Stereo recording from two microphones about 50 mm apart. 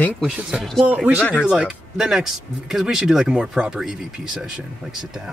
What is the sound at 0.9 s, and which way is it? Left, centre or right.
Speech, right.